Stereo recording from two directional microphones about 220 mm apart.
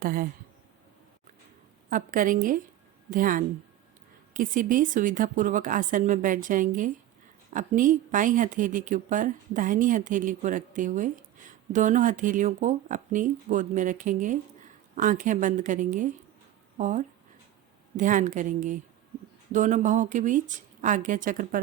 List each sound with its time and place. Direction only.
0.0 s a woman's voice: 40° right (ahead or behind)
1.9 s a woman's voice: 35° right (ahead or behind)